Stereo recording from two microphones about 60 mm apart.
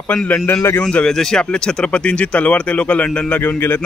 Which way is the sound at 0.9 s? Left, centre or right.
Centre.